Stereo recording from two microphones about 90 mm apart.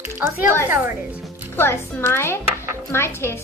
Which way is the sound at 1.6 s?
25° left (ahead or behind).